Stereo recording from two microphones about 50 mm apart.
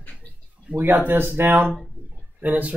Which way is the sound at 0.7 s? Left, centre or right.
Right.